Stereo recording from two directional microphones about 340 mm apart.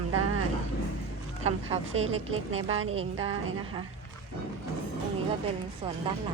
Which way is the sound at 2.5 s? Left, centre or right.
Right.